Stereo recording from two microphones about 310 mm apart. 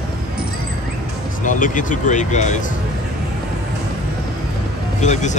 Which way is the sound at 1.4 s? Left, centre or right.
Left.